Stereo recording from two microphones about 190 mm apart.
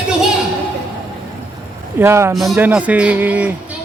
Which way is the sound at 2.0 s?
15° right (ahead or behind).